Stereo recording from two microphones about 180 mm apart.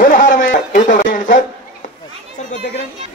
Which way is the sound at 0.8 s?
45° left (ahead or behind).